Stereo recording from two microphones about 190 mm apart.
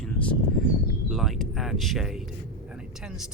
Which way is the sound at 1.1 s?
Centre (ahead or behind).